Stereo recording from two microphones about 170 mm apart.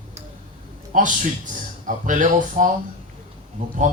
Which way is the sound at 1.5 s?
50° right (ahead or behind).